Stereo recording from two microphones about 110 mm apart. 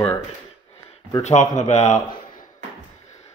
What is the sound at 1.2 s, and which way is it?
Speech, 90° left.